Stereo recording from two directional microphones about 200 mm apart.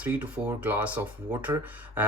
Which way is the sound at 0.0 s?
10° right (ahead or behind).